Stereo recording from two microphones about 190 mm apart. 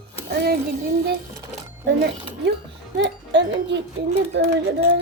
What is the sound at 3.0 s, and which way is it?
Speech, 70° right (ahead or behind).